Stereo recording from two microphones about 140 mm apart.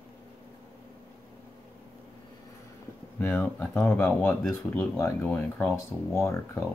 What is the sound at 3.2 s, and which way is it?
Speech, 15° left (ahead or behind).